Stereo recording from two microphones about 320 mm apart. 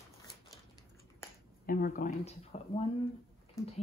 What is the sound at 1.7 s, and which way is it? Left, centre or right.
Speech, left.